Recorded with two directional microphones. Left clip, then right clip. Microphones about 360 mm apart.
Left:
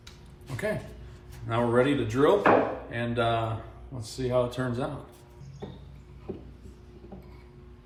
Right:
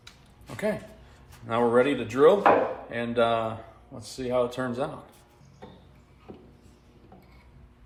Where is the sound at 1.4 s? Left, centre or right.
Centre.